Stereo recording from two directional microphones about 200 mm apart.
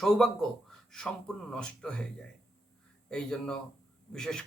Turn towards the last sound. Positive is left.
turn(degrees=5)  # may be behind; listen again after turning